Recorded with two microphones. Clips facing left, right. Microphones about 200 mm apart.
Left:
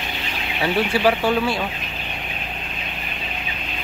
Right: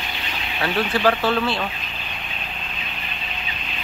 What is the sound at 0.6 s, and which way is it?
Speech, 10° left (ahead or behind).